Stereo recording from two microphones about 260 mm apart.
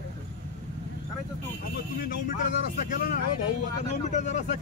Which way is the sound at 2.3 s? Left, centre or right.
Left.